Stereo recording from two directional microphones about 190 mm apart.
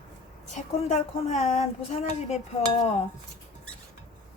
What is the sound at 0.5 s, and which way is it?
A woman's voice, 40° left (ahead or behind).